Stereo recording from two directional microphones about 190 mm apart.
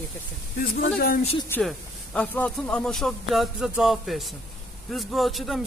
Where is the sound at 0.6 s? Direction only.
50° left (ahead or behind).